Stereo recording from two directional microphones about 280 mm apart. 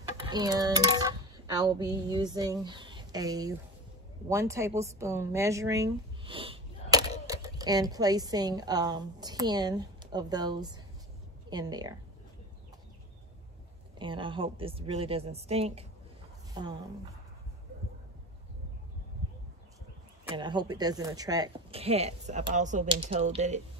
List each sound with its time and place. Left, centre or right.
0.2 s a woman's voice: centre
13.9 s speech: centre
20.3 s speech: centre